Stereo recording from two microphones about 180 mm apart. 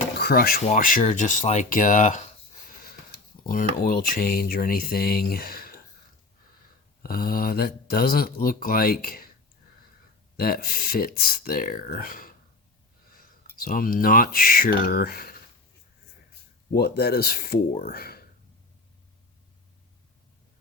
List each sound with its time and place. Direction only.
0.2 s speech: 60° left (ahead or behind)
0.6 s speech: 45° left (ahead or behind)
2.6 s snort: 55° left (ahead or behind)
3.4 s speech: 50° left (ahead or behind)
7.0 s speech: 55° left (ahead or behind)
10.3 s speech: 55° left (ahead or behind)
16.7 s speech: 60° left (ahead or behind)